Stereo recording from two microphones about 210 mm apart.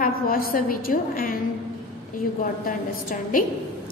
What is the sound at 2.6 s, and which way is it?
Speech, 40° left (ahead or behind).